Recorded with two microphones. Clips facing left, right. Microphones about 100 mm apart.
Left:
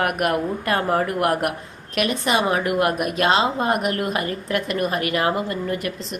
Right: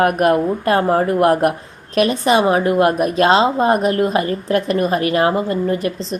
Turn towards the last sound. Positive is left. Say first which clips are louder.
# right 6 dB
turn(degrees=-30)  # may be behind; listen again after turning